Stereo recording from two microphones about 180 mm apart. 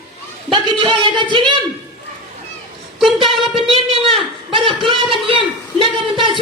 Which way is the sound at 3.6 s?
30° right (ahead or behind).